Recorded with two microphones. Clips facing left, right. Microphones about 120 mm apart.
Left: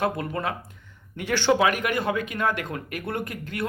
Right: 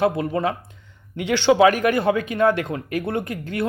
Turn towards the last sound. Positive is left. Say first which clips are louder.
# right 5 dB
turn(degrees=-30)  # may be behind; listen again after turning